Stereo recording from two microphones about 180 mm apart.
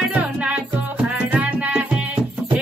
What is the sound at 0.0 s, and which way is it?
Music, 5° right (ahead or behind).